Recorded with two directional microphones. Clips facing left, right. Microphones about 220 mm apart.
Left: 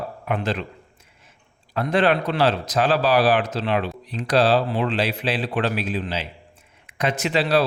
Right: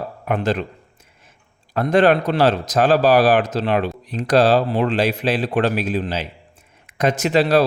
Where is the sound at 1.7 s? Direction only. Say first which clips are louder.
Right 5 dB; 45° right (ahead or behind).